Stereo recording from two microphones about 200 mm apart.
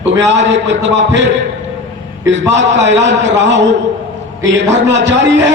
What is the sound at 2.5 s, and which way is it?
A man's voice, 60° right (ahead or behind).